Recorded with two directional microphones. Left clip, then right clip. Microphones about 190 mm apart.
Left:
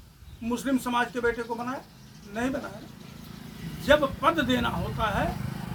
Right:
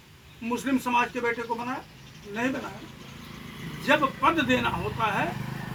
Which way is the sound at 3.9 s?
25° left (ahead or behind).